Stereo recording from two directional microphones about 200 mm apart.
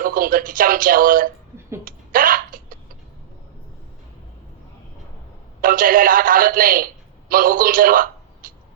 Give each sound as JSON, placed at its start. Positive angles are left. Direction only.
{"t": 0.0, "sound": "speech", "side_deg": -45}
{"t": 1.8, "sound": "hiccup", "side_deg": -45}
{"t": 5.6, "sound": "speech", "side_deg": -45}